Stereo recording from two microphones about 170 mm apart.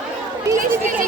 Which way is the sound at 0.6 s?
50° right (ahead or behind).